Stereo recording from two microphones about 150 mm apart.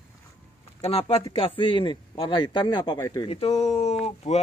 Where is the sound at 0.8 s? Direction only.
40° left (ahead or behind).